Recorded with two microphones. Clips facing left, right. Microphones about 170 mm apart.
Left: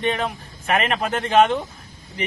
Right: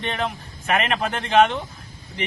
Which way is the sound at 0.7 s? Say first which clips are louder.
Left 1 dB; 40° left (ahead or behind).